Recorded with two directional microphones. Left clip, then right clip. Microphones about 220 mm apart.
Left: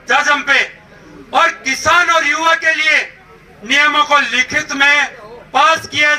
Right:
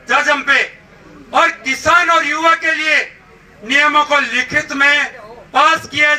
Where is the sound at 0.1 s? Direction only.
45° left (ahead or behind).